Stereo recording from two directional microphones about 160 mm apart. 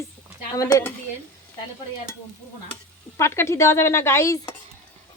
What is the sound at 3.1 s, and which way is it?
Speech, 15° left (ahead or behind).